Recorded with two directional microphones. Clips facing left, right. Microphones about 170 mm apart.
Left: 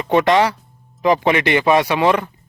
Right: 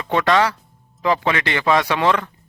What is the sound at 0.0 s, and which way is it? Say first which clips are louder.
Speech: left 3 dB; 20° left (ahead or behind).